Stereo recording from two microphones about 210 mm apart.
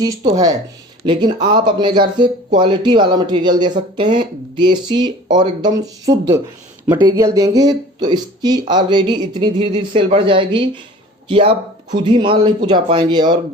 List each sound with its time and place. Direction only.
0.0 s speech: 20° right (ahead or behind)